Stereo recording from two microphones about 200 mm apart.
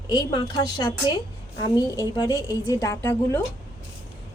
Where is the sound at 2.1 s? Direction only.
20° left (ahead or behind).